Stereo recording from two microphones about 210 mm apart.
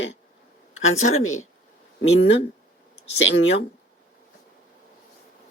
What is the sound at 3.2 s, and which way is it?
Speech, 55° left (ahead or behind).